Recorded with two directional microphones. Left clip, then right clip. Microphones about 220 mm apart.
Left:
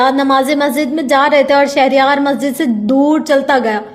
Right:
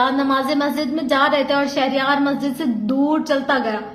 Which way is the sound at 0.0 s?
35° left (ahead or behind).